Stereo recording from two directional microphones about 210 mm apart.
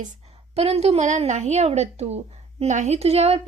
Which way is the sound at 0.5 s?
30° right (ahead or behind).